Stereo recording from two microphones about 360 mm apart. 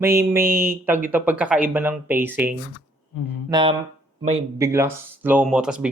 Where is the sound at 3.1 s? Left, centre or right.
Left.